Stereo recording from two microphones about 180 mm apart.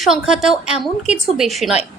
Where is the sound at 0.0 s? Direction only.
Centre (ahead or behind).